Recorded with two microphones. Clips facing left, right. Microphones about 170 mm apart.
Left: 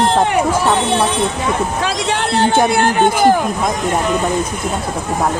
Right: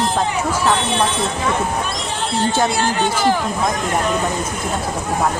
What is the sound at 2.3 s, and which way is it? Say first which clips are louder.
Music: left 4 dB; 65° left (ahead or behind).